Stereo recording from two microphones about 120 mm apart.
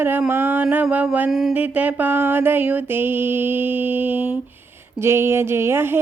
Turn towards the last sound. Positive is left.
turn(degrees=-20)  # may be behind; listen again after turning